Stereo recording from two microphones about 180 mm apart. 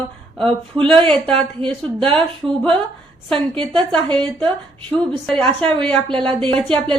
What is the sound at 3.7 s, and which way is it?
A woman's voice, 5° left (ahead or behind).